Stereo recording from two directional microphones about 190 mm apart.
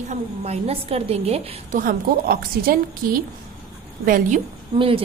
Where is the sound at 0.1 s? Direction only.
35° right (ahead or behind).